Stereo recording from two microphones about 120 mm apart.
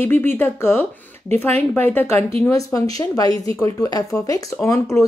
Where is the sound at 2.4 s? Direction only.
25° left (ahead or behind).